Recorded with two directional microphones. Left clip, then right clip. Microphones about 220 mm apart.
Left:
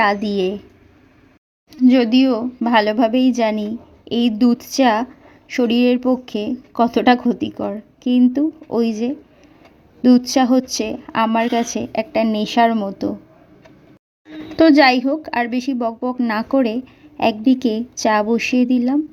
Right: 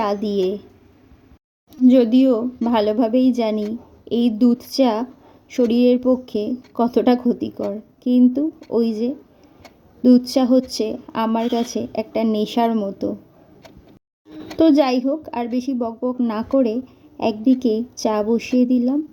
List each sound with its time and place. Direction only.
0.0 s a woman's voice: 20° left (ahead or behind)
1.9 s a woman's voice: 10° left (ahead or behind)
14.6 s a woman's voice: 20° left (ahead or behind)